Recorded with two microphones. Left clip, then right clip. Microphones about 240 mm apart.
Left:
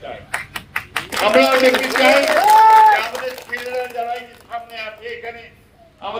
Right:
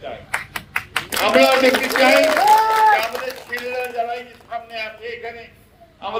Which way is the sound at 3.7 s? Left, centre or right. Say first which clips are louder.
Even; right.